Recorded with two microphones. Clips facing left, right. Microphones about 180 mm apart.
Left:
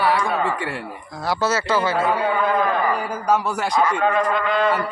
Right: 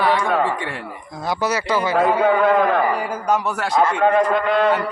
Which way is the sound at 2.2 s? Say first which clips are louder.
Right 4 dB; 75° right (ahead or behind).